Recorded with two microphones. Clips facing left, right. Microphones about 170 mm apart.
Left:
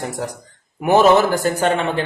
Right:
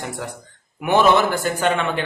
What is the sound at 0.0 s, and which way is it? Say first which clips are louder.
A woman's voice: left 4 dB; 40° left (ahead or behind).